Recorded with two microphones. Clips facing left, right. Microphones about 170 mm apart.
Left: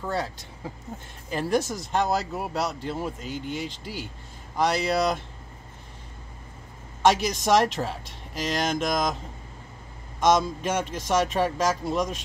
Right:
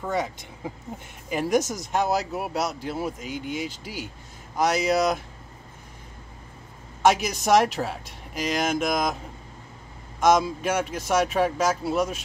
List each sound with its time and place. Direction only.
0.0 s speech: 15° right (ahead or behind)
7.1 s speech: 10° right (ahead or behind)
10.2 s speech: 10° right (ahead or behind)